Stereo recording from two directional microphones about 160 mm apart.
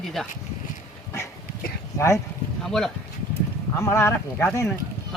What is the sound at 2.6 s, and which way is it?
Speech, 5° left (ahead or behind).